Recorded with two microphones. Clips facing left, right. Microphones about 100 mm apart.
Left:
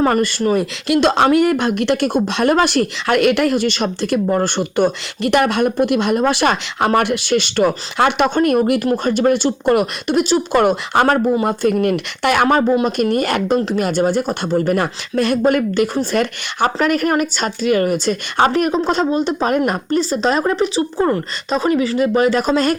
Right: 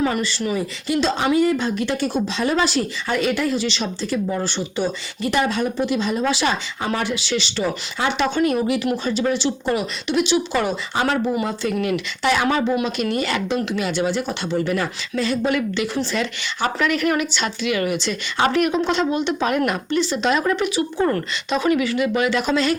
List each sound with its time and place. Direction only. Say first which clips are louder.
0.0 s speech: left 6 dB; 50° left (ahead or behind)